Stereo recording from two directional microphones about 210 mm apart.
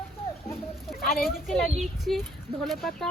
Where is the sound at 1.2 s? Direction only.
Centre (ahead or behind).